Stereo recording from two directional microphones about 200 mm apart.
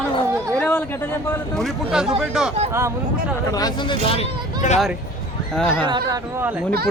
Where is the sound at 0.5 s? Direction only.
10° left (ahead or behind).